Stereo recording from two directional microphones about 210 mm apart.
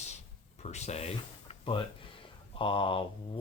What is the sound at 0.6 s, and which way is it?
Speech, 30° left (ahead or behind).